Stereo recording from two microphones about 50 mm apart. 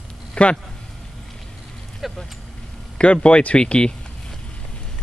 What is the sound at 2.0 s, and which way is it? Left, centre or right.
Vehicle, centre.